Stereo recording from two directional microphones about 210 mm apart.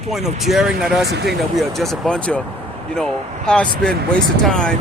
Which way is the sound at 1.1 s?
55° right (ahead or behind).